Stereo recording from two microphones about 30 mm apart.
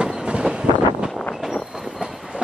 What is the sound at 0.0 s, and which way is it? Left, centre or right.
Train, right.